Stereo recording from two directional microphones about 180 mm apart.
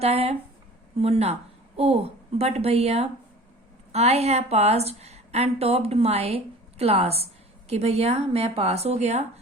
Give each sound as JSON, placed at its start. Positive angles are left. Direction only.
{"t": 0.0, "sound": "a woman's voice", "side_deg": -35}